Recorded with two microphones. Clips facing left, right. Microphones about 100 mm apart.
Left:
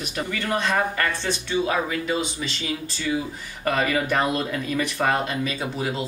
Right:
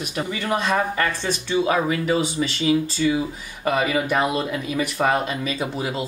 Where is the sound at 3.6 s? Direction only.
15° right (ahead or behind).